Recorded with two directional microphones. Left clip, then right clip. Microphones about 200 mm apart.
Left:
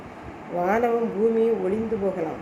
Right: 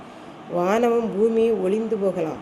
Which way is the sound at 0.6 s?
45° right (ahead or behind).